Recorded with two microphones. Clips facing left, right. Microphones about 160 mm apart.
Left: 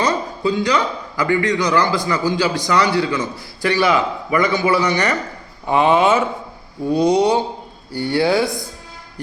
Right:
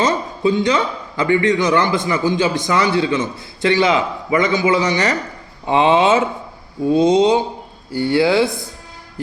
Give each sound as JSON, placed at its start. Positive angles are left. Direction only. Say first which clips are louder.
{"t": 0.0, "sound": "a man's voice", "louder": "right 2 dB", "side_deg": -20}